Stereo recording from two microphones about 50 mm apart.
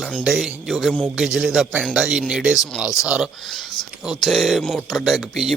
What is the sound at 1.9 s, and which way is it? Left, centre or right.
Speech, centre.